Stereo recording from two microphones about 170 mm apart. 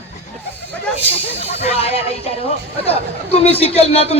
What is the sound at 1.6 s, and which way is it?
A woman's voice, 35° left (ahead or behind).